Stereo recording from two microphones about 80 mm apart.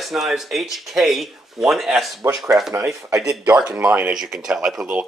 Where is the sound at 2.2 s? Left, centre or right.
Right.